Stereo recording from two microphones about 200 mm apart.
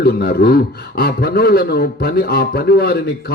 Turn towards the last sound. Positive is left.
turn(degrees=50)  # may be behind; listen again after turning